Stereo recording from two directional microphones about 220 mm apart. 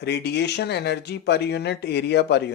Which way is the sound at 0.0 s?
50° left (ahead or behind).